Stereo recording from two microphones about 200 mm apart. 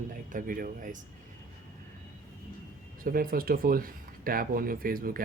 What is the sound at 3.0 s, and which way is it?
Speech, 45° right (ahead or behind).